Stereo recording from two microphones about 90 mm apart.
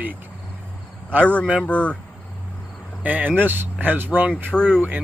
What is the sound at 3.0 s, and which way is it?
Speech, 20° right (ahead or behind).